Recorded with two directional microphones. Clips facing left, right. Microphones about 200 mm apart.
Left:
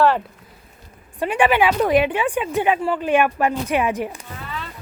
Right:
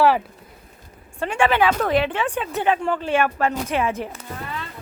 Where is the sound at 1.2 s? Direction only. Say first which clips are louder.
Left 2 dB; 15° left (ahead or behind).